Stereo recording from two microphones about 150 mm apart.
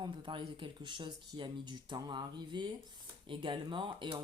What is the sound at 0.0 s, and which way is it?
Speech, 35° right (ahead or behind).